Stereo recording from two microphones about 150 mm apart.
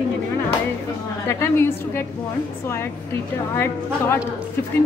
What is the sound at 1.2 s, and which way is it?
A woman's voice, 15° left (ahead or behind).